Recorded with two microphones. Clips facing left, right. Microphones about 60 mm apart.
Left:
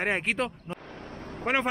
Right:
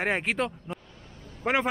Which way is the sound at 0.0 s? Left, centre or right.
Centre.